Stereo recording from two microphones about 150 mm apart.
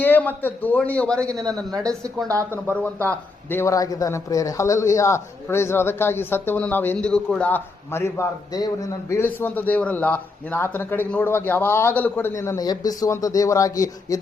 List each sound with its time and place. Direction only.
0.0 s a man's voice: 10° left (ahead or behind)
2.2 s speech: 20° right (ahead or behind)
2.6 s a man's voice: 10° left (ahead or behind)